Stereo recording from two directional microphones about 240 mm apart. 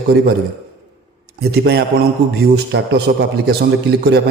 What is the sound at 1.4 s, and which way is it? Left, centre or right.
Mantra, right.